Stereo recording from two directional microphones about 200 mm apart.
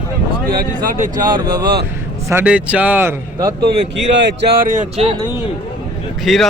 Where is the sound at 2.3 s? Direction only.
10° right (ahead or behind).